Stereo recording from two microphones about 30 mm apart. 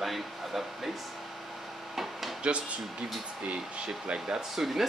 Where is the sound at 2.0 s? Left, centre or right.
Centre.